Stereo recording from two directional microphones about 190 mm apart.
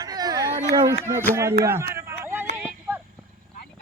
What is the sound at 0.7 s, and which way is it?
Speech, 15° right (ahead or behind).